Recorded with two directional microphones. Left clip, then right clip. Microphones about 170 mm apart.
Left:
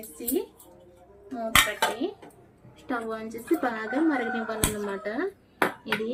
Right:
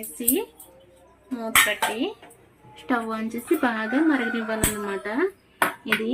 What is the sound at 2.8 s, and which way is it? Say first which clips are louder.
Speech: right 5 dB; 45° right (ahead or behind).